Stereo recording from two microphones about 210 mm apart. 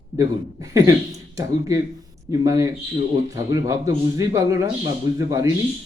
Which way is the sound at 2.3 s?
15° right (ahead or behind).